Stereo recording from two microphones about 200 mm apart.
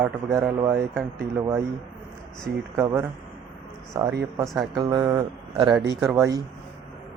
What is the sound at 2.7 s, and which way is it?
Speech, 10° right (ahead or behind).